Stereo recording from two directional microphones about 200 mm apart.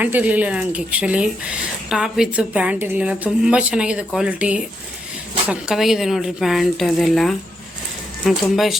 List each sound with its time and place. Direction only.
0.0 s speech: 10° right (ahead or behind)